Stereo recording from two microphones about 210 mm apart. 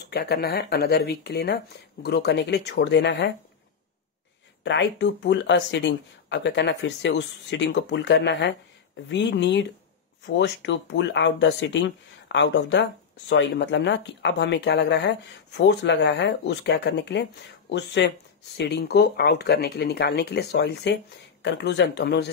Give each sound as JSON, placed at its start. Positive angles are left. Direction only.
{"t": 0.1, "sound": "speech", "side_deg": 50}
{"t": 4.6, "sound": "speech", "side_deg": 55}